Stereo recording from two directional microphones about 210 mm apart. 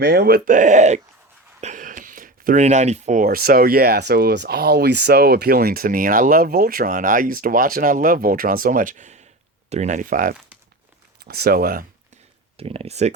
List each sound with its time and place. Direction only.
0.0 s speech: 50° right (ahead or behind)
12.5 s speech: 30° right (ahead or behind)